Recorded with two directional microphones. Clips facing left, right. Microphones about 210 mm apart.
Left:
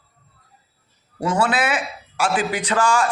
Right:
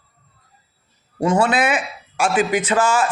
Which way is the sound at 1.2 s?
25° right (ahead or behind).